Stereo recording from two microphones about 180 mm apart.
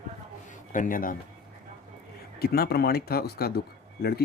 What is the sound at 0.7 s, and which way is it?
Speech, 50° left (ahead or behind).